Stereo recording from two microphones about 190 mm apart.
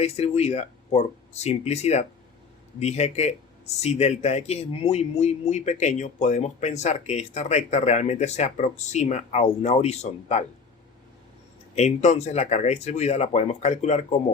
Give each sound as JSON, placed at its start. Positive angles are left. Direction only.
{"t": 0.0, "sound": "speech", "side_deg": 35}
{"t": 11.7, "sound": "speech", "side_deg": 35}